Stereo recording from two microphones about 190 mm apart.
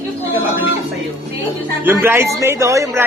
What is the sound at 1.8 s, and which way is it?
Speech, 10° right (ahead or behind).